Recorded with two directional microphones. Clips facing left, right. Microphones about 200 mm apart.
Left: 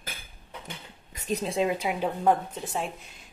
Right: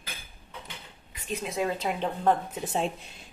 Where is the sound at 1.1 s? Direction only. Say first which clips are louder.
Left 4 dB; 40° left (ahead or behind).